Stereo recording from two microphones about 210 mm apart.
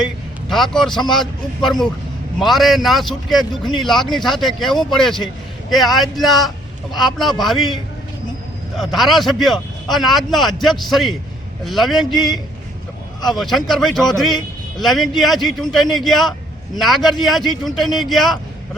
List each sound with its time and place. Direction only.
0.0 s a man's voice: centre (ahead or behind)